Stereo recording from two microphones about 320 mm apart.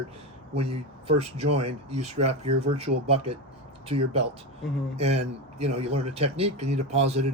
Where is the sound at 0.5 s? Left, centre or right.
Centre.